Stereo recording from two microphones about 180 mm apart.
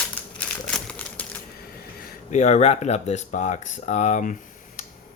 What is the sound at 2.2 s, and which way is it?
Speech, 40° left (ahead or behind).